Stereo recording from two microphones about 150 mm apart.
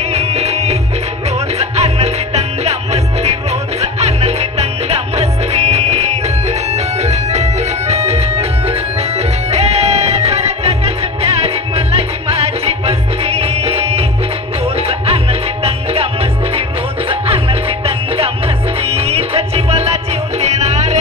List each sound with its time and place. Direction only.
0.0 s music: 45° right (ahead or behind)